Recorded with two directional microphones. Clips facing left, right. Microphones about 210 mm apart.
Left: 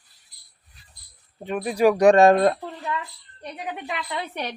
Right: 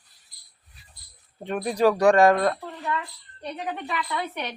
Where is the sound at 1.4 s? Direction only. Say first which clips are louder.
Left 2 dB; 5° left (ahead or behind); by 2.6 s 25° left (ahead or behind).